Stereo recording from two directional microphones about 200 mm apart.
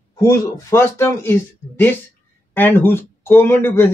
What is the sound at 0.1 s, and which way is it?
Speech, 15° left (ahead or behind).